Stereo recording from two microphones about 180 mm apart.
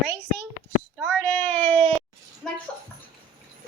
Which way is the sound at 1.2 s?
5° left (ahead or behind).